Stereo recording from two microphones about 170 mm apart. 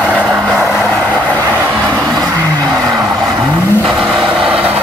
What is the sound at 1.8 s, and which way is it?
Music, 5° left (ahead or behind).